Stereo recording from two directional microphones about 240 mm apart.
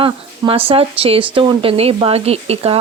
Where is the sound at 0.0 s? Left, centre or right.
Right.